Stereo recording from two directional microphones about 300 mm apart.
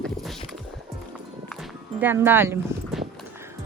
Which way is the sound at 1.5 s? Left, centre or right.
Centre.